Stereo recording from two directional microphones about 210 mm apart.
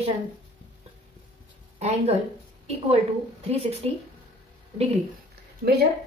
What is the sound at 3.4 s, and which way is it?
Speech, 30° right (ahead or behind).